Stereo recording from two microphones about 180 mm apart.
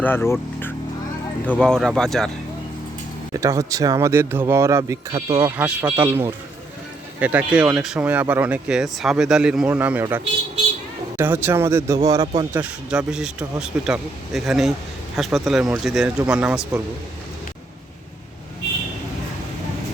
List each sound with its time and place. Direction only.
0.0 s speech: 10° left (ahead or behind)
3.3 s speech: 15° right (ahead or behind)
11.2 s speech: 10° right (ahead or behind)
12.5 s speech: 5° right (ahead or behind)